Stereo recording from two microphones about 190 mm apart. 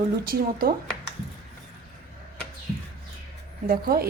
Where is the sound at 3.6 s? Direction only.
50° right (ahead or behind).